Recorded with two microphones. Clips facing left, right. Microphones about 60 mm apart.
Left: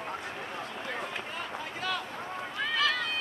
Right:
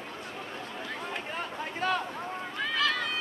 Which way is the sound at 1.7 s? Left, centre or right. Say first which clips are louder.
Right 5 dB; right.